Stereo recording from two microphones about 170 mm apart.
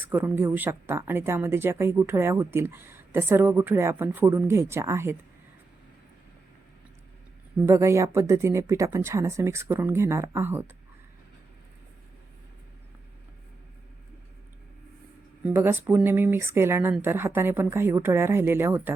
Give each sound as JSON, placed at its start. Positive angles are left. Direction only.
{"t": 0.0, "sound": "a woman's voice", "side_deg": -10}
{"t": 7.6, "sound": "a woman's voice", "side_deg": -15}
{"t": 15.4, "sound": "a woman's voice", "side_deg": -10}